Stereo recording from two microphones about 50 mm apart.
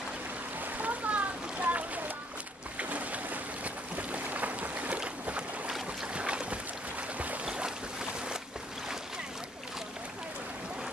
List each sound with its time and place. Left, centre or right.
0.6 s a sound: right
2.8 s boat: right
6.1 s boat: right
7.4 s boat: centre